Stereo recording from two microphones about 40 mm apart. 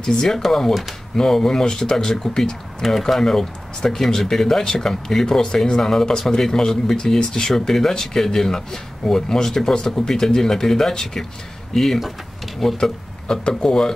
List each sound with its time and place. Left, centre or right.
0.0 s speech: centre